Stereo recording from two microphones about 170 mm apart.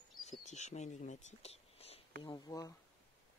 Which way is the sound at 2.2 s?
25° left (ahead or behind).